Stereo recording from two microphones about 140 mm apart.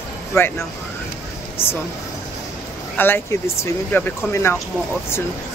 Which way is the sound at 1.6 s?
45° left (ahead or behind).